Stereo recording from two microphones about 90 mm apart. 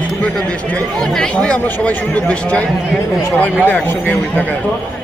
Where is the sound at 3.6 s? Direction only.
20° left (ahead or behind).